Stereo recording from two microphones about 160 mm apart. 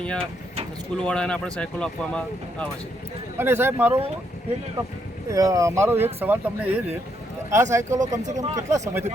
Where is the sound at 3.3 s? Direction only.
15° right (ahead or behind).